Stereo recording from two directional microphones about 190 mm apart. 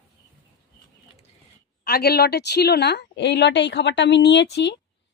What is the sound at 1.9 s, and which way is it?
Speech, 55° left (ahead or behind).